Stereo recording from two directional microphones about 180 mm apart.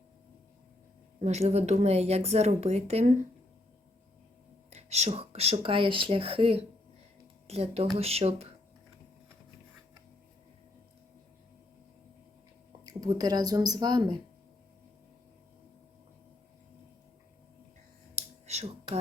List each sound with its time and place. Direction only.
1.2 s a woman's voice: 35° right (ahead or behind)
4.7 s a woman's voice: 35° right (ahead or behind)
12.8 s speech: 20° right (ahead or behind)
18.1 s a sound: 35° right (ahead or behind)